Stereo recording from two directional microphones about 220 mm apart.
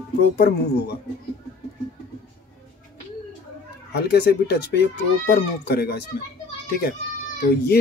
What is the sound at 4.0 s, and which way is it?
Speech, 50° left (ahead or behind).